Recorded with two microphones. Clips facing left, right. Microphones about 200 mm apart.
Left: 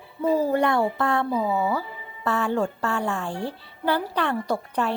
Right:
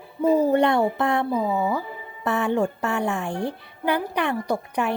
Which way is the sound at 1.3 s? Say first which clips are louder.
Right 1 dB; 10° left (ahead or behind).